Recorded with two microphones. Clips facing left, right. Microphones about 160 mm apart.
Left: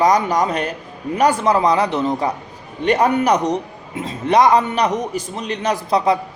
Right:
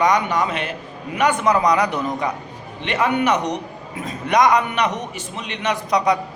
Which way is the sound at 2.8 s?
40° left (ahead or behind).